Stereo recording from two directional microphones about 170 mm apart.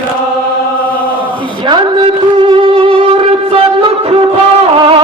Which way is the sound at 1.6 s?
30° right (ahead or behind).